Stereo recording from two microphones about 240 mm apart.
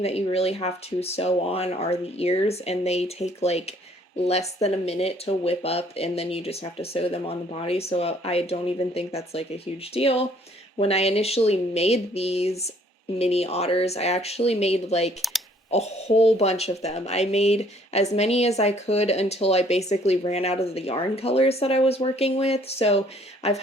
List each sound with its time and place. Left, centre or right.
0.0 s speech: left